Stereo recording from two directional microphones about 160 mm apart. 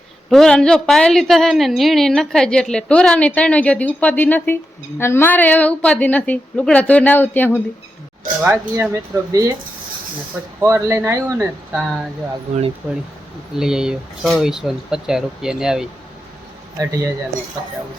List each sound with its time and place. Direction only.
0.3 s a woman's voice: 5° left (ahead or behind)
8.4 s speech: 15° right (ahead or behind)
10.6 s speech: 15° right (ahead or behind)
11.7 s a woman's voice: centre (ahead or behind)
13.6 s a woman's voice: 5° right (ahead or behind)
16.7 s speech: 20° right (ahead or behind)